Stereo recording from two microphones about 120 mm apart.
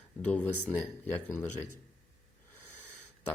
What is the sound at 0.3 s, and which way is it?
Speech, 15° left (ahead or behind).